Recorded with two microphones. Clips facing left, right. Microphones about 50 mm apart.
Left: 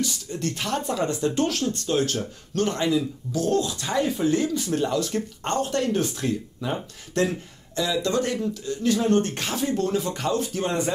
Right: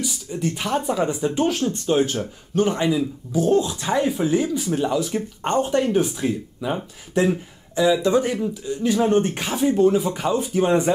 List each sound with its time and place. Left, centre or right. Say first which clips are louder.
0.0 s speech: right 2 dB; centre